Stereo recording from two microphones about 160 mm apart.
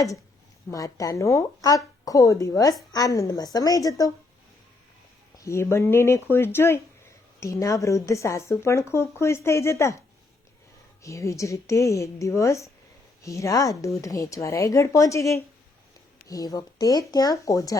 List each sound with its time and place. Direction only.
0.7 s speech: 20° left (ahead or behind)
5.4 s speech: 15° left (ahead or behind)
11.0 s speech: 20° left (ahead or behind)